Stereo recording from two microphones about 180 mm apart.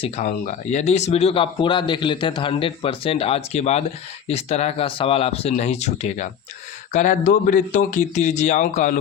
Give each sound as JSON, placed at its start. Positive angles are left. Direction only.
{"t": 0.0, "sound": "speech", "side_deg": 40}